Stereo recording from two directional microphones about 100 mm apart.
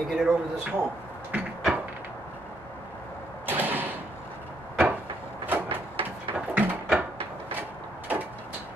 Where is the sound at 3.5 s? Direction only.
20° right (ahead or behind).